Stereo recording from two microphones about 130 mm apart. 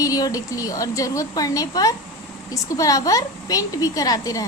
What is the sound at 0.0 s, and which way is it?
A woman's voice, 25° left (ahead or behind).